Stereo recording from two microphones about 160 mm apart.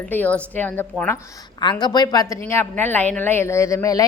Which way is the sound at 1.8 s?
25° left (ahead or behind).